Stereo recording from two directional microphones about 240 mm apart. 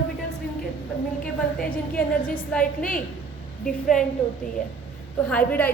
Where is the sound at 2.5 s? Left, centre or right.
Centre.